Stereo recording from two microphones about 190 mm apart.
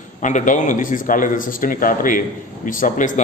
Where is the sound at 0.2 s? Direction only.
40° left (ahead or behind).